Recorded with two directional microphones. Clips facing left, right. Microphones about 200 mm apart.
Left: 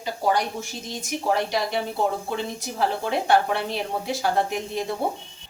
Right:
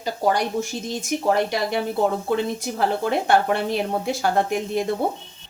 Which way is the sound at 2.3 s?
55° right (ahead or behind).